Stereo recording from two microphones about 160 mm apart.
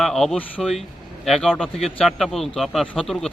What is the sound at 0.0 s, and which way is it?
Speech, centre (ahead or behind).